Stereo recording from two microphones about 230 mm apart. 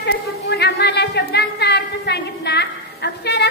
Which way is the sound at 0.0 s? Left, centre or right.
Left.